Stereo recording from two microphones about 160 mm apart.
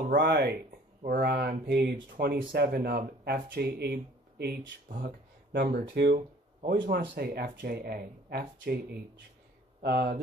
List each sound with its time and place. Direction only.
0.1 s speech: 85° right
6.1 s a sound: 50° right (ahead or behind)
6.9 s speech: 85° right
9.8 s speech: 85° right